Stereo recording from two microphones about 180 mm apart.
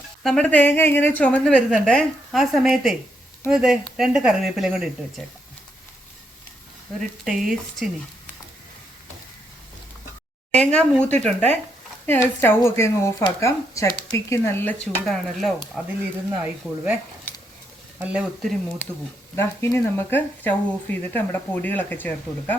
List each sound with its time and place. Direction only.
0.2 s a woman's voice: 5° left (ahead or behind)
7.3 s a woman's voice: centre (ahead or behind)
10.5 s speech: 5° left (ahead or behind)
17.3 s a sound: 10° left (ahead or behind)
18.0 s a woman's voice: 5° right (ahead or behind)
18.8 s speech: 10° left (ahead or behind)